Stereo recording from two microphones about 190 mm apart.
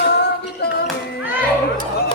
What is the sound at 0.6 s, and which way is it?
Music, 60° left (ahead or behind).